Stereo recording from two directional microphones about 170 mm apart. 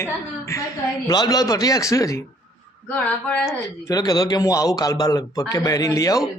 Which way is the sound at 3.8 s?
20° left (ahead or behind).